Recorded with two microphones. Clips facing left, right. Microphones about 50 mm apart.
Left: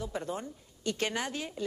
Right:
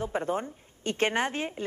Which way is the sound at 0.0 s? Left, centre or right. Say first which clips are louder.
Right 6 dB; right.